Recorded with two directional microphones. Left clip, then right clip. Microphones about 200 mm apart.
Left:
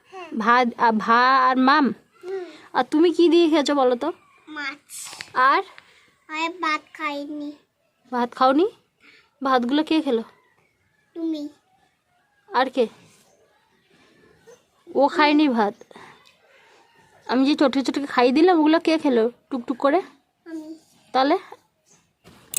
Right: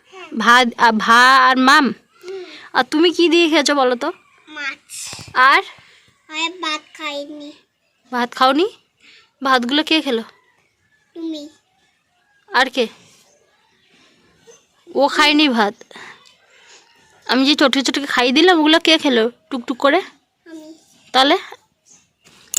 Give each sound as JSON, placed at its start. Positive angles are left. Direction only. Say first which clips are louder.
{"t": 0.1, "sound": "speech", "louder": "right 6 dB", "side_deg": 0}
{"t": 5.3, "sound": "speech", "louder": "right 6 dB", "side_deg": 0}
{"t": 7.1, "sound": "a child's voice", "louder": "right 3 dB", "side_deg": 30}
{"t": 8.1, "sound": "a child's voice", "louder": "right 4 dB", "side_deg": 0}
{"t": 12.5, "sound": "a woman's voice", "louder": "right 4 dB", "side_deg": 0}
{"t": 14.9, "sound": "speech", "louder": "right 4 dB", "side_deg": 0}
{"t": 17.2, "sound": "speech", "louder": "right 5 dB", "side_deg": 0}